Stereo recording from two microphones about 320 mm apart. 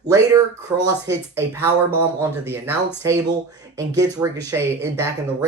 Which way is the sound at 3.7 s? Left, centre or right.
Centre.